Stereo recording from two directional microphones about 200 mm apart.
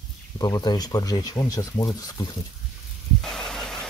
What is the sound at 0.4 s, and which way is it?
A man's voice, 20° left (ahead or behind).